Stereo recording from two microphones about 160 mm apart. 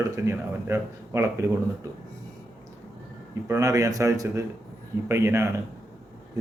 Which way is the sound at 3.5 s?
20° right (ahead or behind).